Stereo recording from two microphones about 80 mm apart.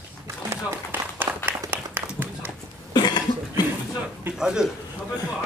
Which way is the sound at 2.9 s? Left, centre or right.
Left.